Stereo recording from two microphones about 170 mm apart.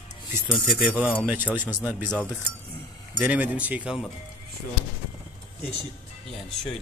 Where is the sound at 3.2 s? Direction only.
10° right (ahead or behind).